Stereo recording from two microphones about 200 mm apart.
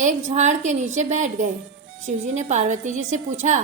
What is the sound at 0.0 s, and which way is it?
A woman's voice, 35° right (ahead or behind).